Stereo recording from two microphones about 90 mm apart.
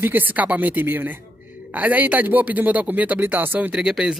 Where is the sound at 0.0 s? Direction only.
20° right (ahead or behind).